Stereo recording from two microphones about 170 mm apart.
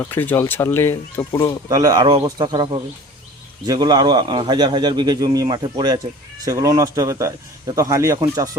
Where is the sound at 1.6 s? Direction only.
20° right (ahead or behind).